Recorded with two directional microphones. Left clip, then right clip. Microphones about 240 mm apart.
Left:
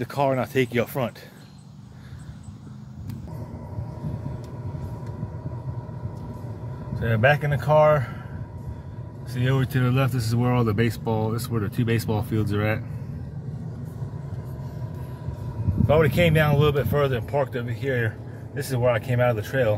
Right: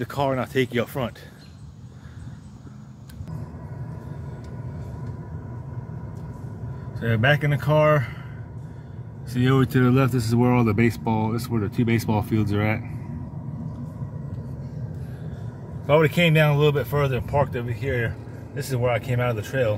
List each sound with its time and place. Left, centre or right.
0.0 s speech: centre
7.0 s speech: centre
9.4 s speech: centre
15.9 s speech: centre